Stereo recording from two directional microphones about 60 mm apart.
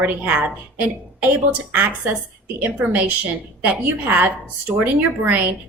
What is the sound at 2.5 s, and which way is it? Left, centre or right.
A woman's voice, right.